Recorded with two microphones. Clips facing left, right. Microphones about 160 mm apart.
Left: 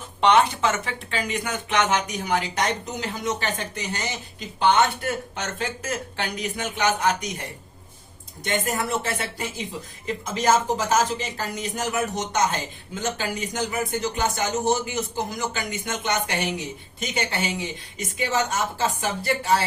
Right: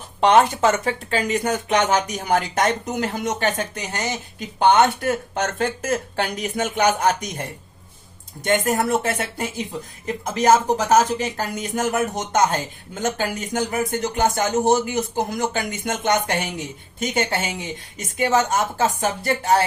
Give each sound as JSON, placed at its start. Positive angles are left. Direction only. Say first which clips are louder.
{"t": 0.2, "sound": "speech", "louder": "right 3 dB", "side_deg": -45}
{"t": 8.4, "sound": "speech", "louder": "right 6 dB", "side_deg": -50}